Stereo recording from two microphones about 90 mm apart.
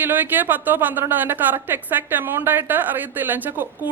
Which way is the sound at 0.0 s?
20° right (ahead or behind).